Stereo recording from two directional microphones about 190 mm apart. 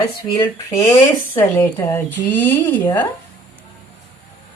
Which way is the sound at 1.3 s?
10° left (ahead or behind).